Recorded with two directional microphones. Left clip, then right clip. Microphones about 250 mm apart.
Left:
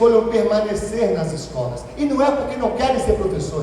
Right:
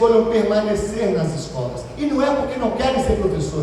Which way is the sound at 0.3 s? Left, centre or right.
Left.